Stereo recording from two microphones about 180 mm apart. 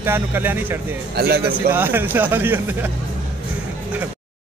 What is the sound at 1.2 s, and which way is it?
Speech, 60° right (ahead or behind).